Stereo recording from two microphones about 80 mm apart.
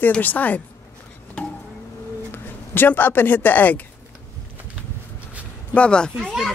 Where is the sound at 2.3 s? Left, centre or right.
Left.